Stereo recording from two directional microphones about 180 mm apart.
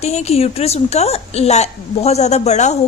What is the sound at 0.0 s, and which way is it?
A woman's voice, 35° left (ahead or behind).